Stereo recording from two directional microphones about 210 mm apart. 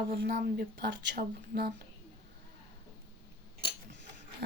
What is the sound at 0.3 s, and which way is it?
Speech, 50° right (ahead or behind).